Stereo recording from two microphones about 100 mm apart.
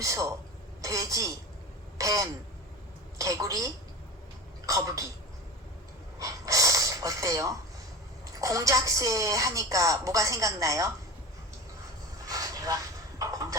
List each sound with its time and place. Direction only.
0.0 s a woman's voice: 35° right (ahead or behind)
6.1 s gasp: 35° right (ahead or behind)
8.4 s a woman's voice: 35° right (ahead or behind)
12.2 s a sound: 35° right (ahead or behind)